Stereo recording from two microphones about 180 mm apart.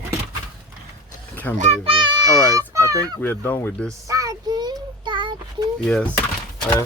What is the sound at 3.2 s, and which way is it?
Speech, 10° left (ahead or behind).